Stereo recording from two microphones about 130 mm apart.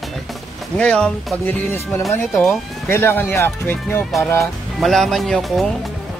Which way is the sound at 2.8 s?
15° left (ahead or behind).